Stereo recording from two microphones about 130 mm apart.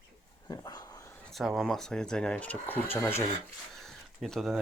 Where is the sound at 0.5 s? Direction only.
30° left (ahead or behind).